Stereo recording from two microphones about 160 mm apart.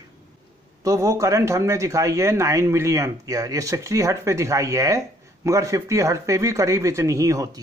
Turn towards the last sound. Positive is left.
turn(degrees=-20)  # may be behind; listen again after turning